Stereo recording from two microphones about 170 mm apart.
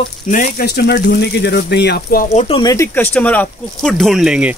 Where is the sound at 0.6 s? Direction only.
70° left (ahead or behind).